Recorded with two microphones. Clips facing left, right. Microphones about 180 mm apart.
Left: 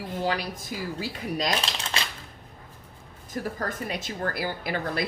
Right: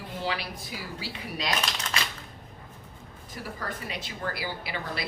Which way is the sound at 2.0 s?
30° left (ahead or behind).